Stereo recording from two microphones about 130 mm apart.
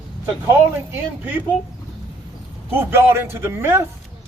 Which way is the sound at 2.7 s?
15° right (ahead or behind).